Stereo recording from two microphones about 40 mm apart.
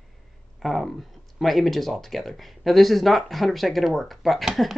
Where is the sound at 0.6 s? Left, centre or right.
Centre.